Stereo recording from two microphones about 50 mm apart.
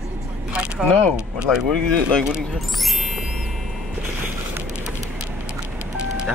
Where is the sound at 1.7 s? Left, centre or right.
Centre.